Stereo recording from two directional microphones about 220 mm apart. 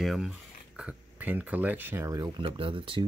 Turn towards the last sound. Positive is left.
turn(degrees=-25)  # may be behind; listen again after turning